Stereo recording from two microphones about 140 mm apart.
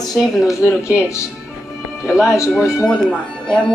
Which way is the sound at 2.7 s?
5° left (ahead or behind).